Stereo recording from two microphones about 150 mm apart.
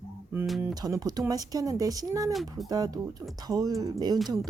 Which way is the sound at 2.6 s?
25° right (ahead or behind).